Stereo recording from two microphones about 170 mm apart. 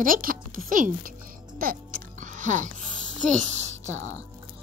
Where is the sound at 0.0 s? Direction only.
55° right (ahead or behind).